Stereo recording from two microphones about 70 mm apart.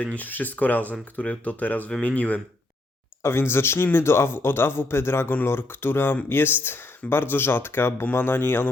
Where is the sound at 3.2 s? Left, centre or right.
Left.